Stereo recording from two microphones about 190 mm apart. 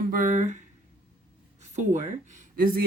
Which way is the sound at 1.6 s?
35° right (ahead or behind).